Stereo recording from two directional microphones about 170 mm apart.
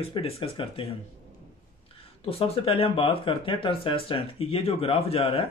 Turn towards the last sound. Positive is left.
turn(degrees=35)  # may be behind; listen again after turning